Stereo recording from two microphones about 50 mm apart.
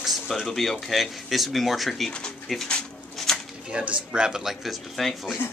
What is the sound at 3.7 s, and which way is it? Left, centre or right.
Speech, centre.